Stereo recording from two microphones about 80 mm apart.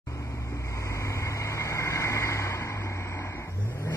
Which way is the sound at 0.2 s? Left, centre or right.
Left.